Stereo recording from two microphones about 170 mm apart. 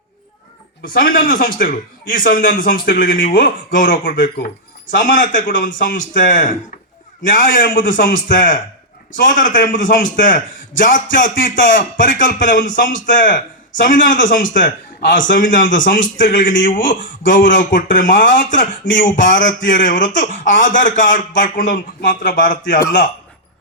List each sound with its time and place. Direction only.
0.8 s a man's voice: 55° left (ahead or behind)